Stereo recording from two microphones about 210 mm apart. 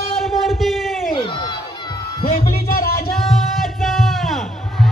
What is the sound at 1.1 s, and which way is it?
Crowd, 25° left (ahead or behind).